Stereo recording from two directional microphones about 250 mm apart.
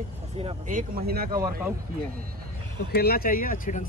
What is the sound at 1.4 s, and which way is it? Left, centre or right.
Speech, centre.